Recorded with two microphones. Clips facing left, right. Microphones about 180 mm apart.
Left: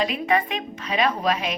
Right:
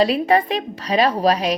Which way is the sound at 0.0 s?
35° right (ahead or behind).